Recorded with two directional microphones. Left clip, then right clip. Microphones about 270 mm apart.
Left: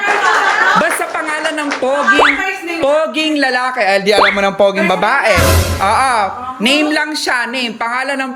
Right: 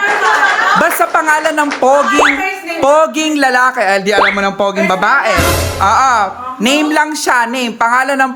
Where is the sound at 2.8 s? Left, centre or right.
Centre.